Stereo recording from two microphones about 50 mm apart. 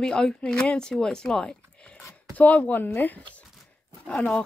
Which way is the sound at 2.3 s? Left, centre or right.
Left.